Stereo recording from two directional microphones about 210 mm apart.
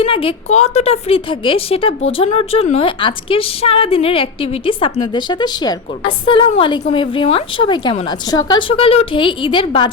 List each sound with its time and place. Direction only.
0.0 s a woman's voice: 25° left (ahead or behind)